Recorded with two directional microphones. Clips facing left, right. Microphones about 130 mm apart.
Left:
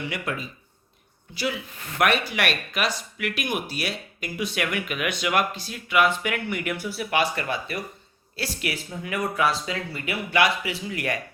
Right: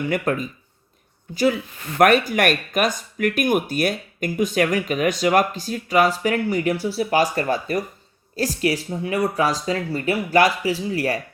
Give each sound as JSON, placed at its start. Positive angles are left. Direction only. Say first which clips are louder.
{"t": 0.0, "sound": "speech", "louder": "right 8 dB", "side_deg": -45}